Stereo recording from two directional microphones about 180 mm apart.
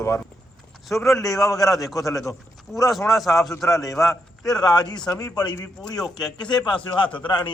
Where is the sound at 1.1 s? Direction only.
Centre (ahead or behind).